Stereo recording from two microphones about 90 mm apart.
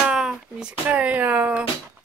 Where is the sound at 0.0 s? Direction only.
10° right (ahead or behind).